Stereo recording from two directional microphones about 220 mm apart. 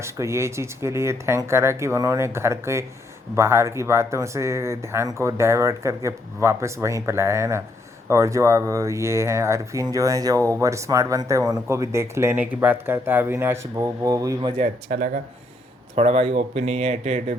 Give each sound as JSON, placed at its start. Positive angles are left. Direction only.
{"t": 0.0, "sound": "speech", "side_deg": -10}
{"t": 14.6, "sound": "speech", "side_deg": -35}